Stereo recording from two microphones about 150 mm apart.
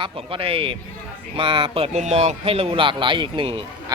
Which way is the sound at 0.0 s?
35° right (ahead or behind).